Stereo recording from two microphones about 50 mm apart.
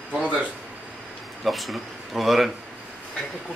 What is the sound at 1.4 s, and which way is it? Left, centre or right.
Speech, centre.